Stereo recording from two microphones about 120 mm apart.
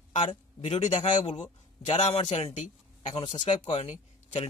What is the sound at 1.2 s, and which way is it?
A man's voice, 65° left (ahead or behind).